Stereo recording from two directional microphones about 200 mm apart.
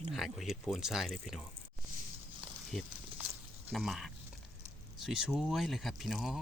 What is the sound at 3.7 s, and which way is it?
Speech, centre (ahead or behind).